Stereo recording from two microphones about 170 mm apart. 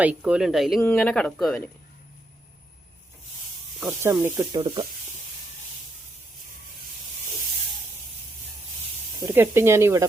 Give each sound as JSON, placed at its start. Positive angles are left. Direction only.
{"t": 0.0, "sound": "speech", "side_deg": -10}
{"t": 3.8, "sound": "speech", "side_deg": -15}
{"t": 4.6, "sound": "speech", "side_deg": -30}
{"t": 9.2, "sound": "speech", "side_deg": -15}